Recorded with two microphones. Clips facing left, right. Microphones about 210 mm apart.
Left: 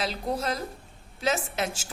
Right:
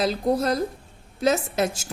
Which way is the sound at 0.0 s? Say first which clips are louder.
Right 7 dB; 40° right (ahead or behind).